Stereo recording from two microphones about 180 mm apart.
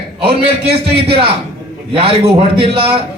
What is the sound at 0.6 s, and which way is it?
A man's voice, 30° right (ahead or behind).